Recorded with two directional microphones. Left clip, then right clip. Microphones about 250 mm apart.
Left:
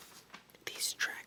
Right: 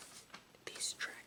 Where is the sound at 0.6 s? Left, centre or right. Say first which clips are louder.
Left 6 dB; centre.